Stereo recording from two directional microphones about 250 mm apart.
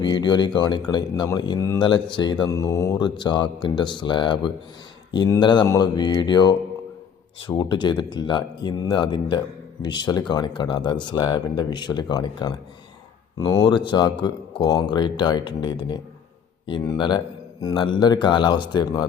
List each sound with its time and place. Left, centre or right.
0.0 s speech: centre